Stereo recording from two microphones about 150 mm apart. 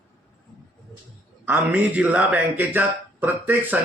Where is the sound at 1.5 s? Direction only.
10° right (ahead or behind).